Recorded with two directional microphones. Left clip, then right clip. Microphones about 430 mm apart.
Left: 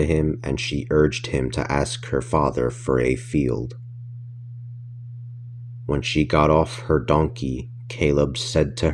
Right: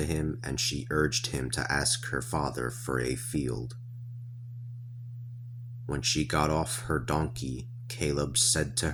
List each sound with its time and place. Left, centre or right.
0.0 s speech: right
5.8 s speech: right